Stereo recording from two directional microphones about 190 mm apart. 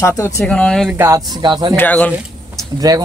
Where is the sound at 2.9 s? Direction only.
20° right (ahead or behind).